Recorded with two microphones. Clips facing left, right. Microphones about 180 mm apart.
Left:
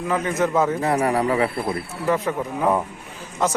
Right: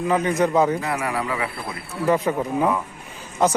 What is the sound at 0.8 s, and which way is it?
Speech, 35° left (ahead or behind).